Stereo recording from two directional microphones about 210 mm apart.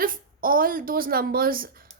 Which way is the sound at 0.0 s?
40° right (ahead or behind).